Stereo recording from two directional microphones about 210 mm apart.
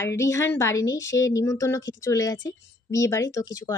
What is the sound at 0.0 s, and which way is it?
A woman's voice, 15° left (ahead or behind).